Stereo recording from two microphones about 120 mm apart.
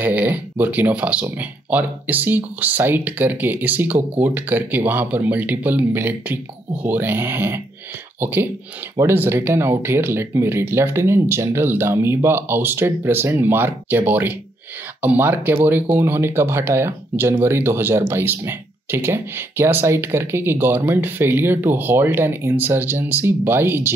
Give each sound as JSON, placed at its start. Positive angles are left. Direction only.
{"t": 0.0, "sound": "speech", "side_deg": -15}